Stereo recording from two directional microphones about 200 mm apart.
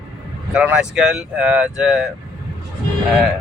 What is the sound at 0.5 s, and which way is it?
Speech, 5° right (ahead or behind).